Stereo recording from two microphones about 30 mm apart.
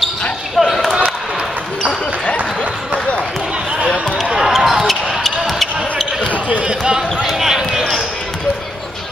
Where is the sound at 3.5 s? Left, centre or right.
Right.